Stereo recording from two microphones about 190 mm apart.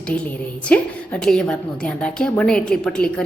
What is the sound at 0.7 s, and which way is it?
A woman's voice, 5° left (ahead or behind).